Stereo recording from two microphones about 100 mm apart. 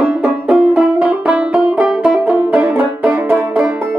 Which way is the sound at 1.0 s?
10° right (ahead or behind).